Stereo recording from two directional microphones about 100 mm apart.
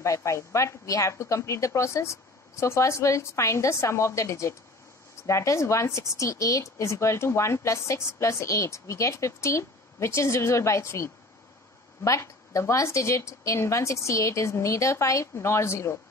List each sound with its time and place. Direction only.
0.0 s a woman's voice: 30° left (ahead or behind)